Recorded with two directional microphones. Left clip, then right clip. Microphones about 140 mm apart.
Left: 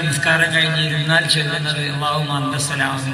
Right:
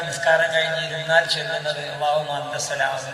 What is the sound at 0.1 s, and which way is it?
A man's voice, 40° right (ahead or behind).